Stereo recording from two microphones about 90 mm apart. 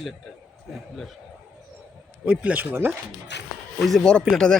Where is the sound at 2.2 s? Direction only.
15° right (ahead or behind).